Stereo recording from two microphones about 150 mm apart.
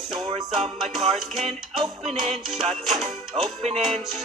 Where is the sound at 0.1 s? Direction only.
30° right (ahead or behind).